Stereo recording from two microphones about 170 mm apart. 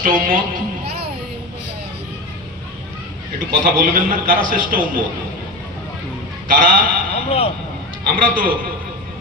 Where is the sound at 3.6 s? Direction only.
55° right (ahead or behind).